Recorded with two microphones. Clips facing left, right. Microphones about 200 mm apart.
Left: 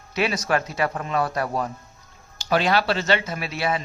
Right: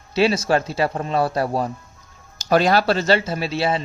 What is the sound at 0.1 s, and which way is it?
Speech, 30° right (ahead or behind).